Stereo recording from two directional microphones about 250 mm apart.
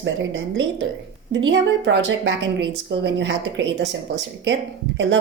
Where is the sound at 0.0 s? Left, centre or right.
Right.